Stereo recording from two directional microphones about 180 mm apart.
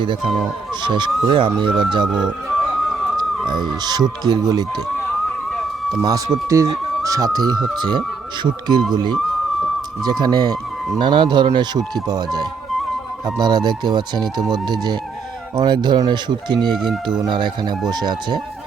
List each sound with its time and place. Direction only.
0.8 s speech: 25° right (ahead or behind)
3.4 s speech: 25° right (ahead or behind)
5.5 s a sound: centre (ahead or behind)
6.0 s speech: 20° right (ahead or behind)
16.7 s speech: centre (ahead or behind)
17.2 s speech: 25° right (ahead or behind)